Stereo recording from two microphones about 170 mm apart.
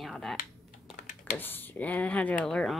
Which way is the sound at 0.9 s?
50° left (ahead or behind).